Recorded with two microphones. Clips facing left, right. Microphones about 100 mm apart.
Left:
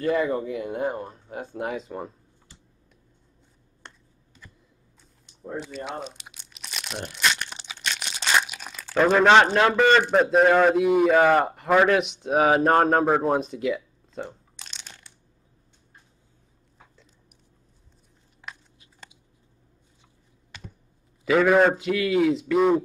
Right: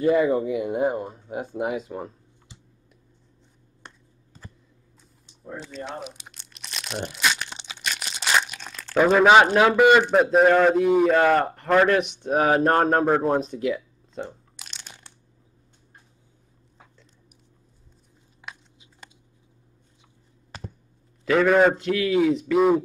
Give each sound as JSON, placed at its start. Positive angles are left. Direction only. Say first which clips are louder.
{"t": 0.0, "sound": "speech", "louder": "right 4 dB", "side_deg": -10}
{"t": 3.8, "sound": "a sound", "louder": "right 1 dB", "side_deg": -15}
{"t": 5.6, "sound": "a man's voice", "louder": "left 1 dB", "side_deg": 5}
{"t": 6.2, "sound": "crumpling", "louder": "even", "side_deg": 5}
{"t": 8.9, "sound": "a man's voice", "louder": "right 1 dB", "side_deg": -5}
{"t": 14.6, "sound": "a sound", "louder": "left 1 dB", "side_deg": -5}
{"t": 18.5, "sound": "biting", "louder": "even", "side_deg": 0}
{"t": 20.5, "sound": "a sound", "louder": "right 5 dB", "side_deg": -35}
{"t": 21.3, "sound": "a man's voice", "louder": "even", "side_deg": 5}